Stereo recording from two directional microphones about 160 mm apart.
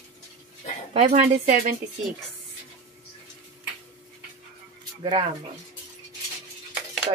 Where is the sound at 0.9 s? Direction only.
45° right (ahead or behind).